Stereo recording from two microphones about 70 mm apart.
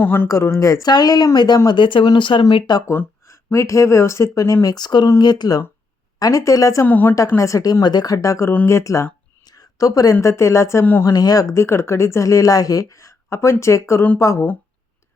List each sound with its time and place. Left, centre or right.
0.0 s a woman's voice: left
0.6 s speech: left
0.9 s speech: left
1.6 s speech: left
3.2 s speech: left
4.6 s speech: left
6.1 s speech: left
6.8 s a woman's voice: left
7.3 s speech: left
9.4 s a woman's voice: left
11.0 s speech: left
11.5 s speech: left